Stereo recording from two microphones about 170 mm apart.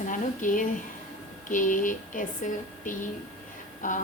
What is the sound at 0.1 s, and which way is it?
Speech, 50° left (ahead or behind).